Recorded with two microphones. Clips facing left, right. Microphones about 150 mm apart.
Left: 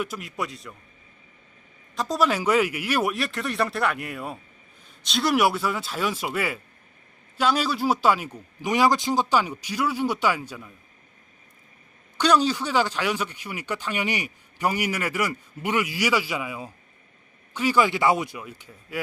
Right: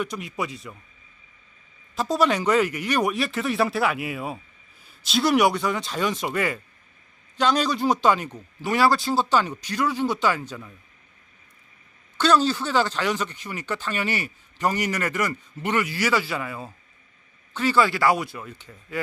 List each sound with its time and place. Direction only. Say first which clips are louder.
0.0 s speech: right 1 dB; centre (ahead or behind)
2.0 s speech: right 2 dB; centre (ahead or behind)
12.1 s speech: right 1 dB; 15° left (ahead or behind)
18.3 s speech: right 1 dB; 10° left (ahead or behind)